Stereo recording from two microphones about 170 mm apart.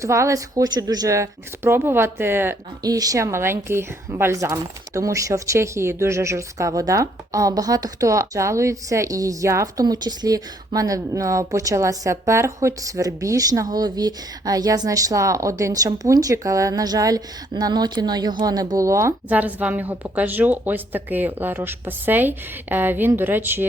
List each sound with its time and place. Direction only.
0.0 s speech: 15° right (ahead or behind)